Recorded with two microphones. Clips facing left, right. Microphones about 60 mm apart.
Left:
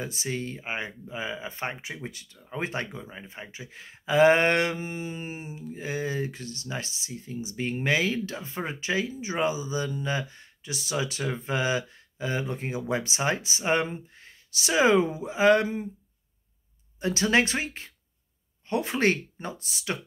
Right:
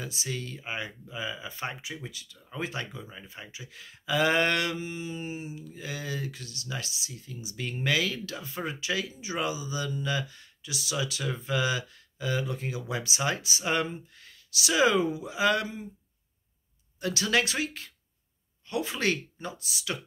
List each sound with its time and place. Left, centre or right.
0.0 s speech: left
17.0 s speech: left